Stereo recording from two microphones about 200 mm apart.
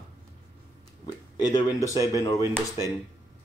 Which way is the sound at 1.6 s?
15° left (ahead or behind).